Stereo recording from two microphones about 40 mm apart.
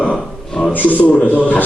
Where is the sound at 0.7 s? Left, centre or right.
Left.